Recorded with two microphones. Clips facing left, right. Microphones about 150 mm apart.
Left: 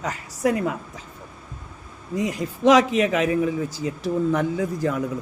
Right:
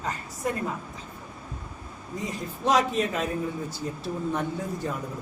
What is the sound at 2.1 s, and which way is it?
A man's voice, 85° left.